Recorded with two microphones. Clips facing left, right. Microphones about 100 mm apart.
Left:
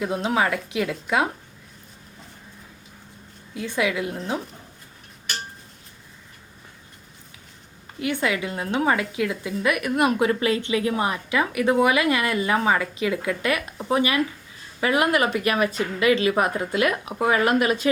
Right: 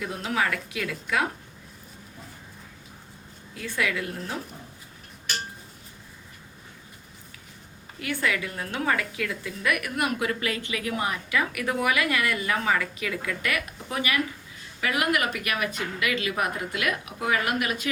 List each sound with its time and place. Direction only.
0.0 s a woman's voice: 25° left (ahead or behind)
3.6 s a woman's voice: 20° left (ahead or behind)
7.9 s a woman's voice: 20° left (ahead or behind)